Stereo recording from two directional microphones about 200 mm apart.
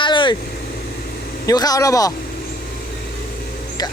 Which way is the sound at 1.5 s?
20° left (ahead or behind).